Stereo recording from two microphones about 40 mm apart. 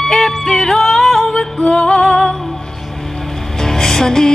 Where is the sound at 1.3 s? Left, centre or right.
Left.